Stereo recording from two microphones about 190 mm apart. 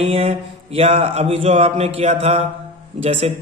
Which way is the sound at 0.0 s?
30° right (ahead or behind).